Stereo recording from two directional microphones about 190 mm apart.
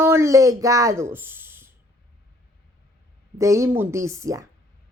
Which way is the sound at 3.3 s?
15° right (ahead or behind).